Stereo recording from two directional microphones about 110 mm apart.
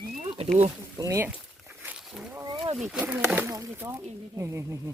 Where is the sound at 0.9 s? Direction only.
30° right (ahead or behind).